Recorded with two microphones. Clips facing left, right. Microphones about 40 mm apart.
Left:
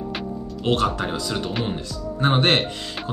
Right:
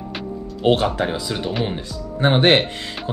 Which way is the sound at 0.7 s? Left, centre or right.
Right.